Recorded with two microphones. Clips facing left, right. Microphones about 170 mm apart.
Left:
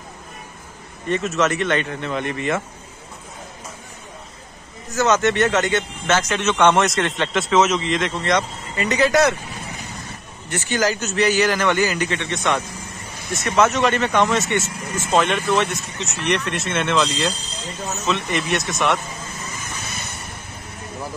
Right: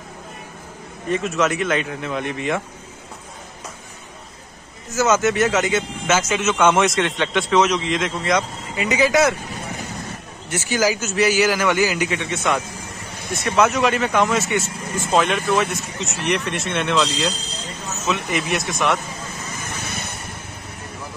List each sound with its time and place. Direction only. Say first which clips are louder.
1.0 s speech: even; centre (ahead or behind)
4.9 s speech: even; centre (ahead or behind)
10.7 s speech: right 1 dB; 5° right (ahead or behind)
19.9 s vehicle: right 3 dB; 60° right (ahead or behind)